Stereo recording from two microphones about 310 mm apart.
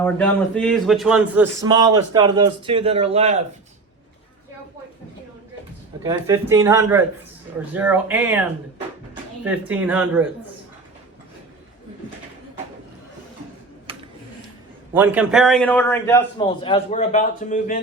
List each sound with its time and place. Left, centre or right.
0.0 s speech: centre
6.0 s speech: centre
13.9 s a sound: centre
14.9 s a man's voice: centre; by 17.7 s left